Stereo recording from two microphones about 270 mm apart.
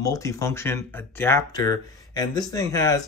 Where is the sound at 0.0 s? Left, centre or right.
Centre.